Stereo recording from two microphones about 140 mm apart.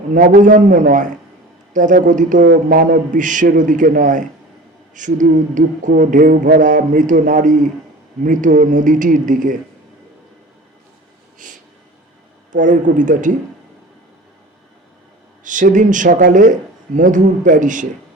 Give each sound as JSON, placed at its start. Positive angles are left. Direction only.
{"t": 0.1, "sound": "a man's voice", "side_deg": -70}
{"t": 11.3, "sound": "a sound", "side_deg": -65}
{"t": 12.5, "sound": "a man's voice", "side_deg": -65}
{"t": 15.4, "sound": "a man's voice", "side_deg": -65}